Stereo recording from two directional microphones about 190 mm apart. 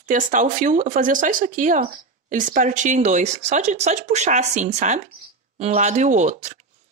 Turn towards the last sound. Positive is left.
turn(degrees=-40)  # may be behind; listen again after turning